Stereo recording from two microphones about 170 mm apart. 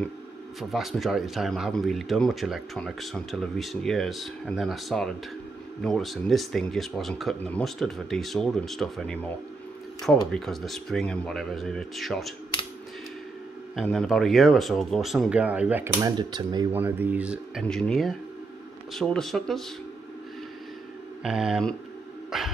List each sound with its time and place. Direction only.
0.6 s speech: centre (ahead or behind)
13.7 s speech: centre (ahead or behind)
16.2 s speech: 25° right (ahead or behind)
16.7 s speech: 10° right (ahead or behind)
21.2 s speech: 5° right (ahead or behind)